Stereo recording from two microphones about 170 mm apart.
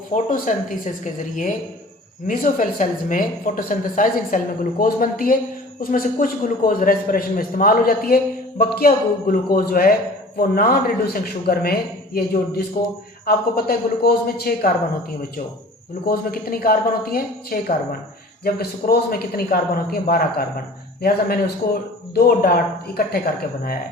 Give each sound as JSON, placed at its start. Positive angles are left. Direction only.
{"t": 0.1, "sound": "a woman's voice", "side_deg": 50}
{"t": 16.0, "sound": "a man's voice", "side_deg": 60}